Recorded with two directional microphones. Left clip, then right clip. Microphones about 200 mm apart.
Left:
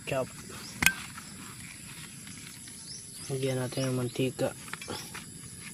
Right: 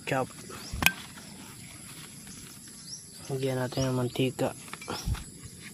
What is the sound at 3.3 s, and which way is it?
Speech, centre (ahead or behind).